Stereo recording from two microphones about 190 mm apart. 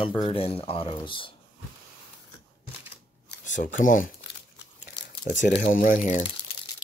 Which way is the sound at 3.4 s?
40° left (ahead or behind).